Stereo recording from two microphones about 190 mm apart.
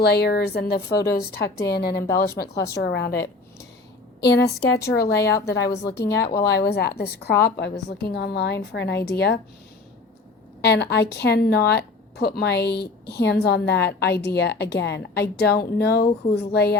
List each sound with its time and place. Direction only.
0.0 s a woman's voice: 60° left (ahead or behind)
2.0 s a woman's voice: 15° left (ahead or behind)
2.7 s a woman's voice: 60° left (ahead or behind)
4.4 s a woman's voice: 15° left (ahead or behind)
4.9 s a woman's voice: 60° left (ahead or behind)
10.6 s a woman's voice: 60° left (ahead or behind)